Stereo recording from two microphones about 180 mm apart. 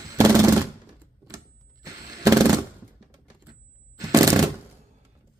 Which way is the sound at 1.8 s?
20° right (ahead or behind).